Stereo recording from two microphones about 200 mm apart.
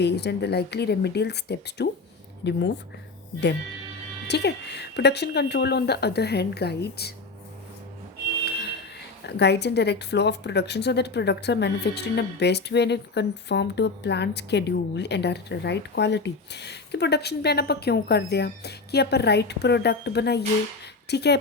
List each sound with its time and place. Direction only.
0.0 s speech: 55° left (ahead or behind)
4.3 s speech: 55° left (ahead or behind)
9.2 s speech: 60° left (ahead or behind)